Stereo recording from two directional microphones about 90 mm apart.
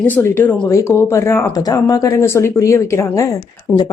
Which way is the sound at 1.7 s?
45° left (ahead or behind).